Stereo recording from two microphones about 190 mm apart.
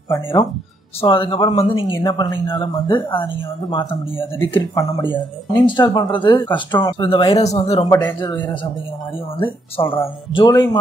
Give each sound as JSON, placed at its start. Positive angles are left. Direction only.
{"t": 0.1, "sound": "speech", "side_deg": 25}
{"t": 7.8, "sound": "speech", "side_deg": 10}
{"t": 8.2, "sound": "speech", "side_deg": 25}